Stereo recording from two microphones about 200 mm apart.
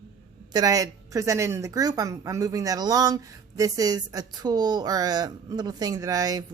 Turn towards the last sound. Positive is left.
turn(degrees=-20)  # may be behind; listen again after turning